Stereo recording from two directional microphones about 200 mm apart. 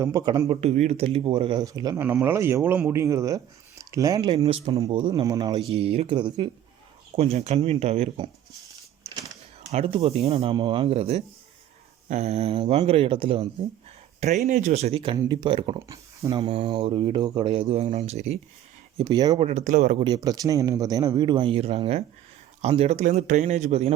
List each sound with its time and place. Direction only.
0.0 s speech: 20° right (ahead or behind)
9.6 s speech: 30° right (ahead or behind)
18.9 s speech: 20° right (ahead or behind)
19.5 s speech: 35° right (ahead or behind)
20.1 s speech: 20° right (ahead or behind); by 23.9 s 35° right (ahead or behind)